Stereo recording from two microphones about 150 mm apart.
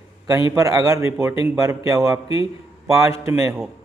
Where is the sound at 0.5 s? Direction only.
20° right (ahead or behind).